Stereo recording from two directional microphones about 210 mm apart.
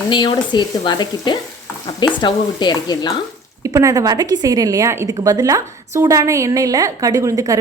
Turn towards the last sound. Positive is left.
turn(degrees=-15)  # may be behind; listen again after turning